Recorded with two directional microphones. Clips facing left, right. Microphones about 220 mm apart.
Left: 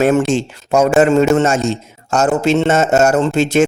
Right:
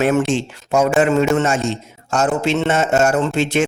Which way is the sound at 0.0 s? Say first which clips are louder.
Left 3 dB; 40° left (ahead or behind).